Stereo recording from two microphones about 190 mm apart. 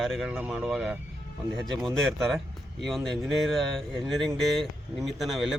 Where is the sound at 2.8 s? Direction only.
Centre (ahead or behind).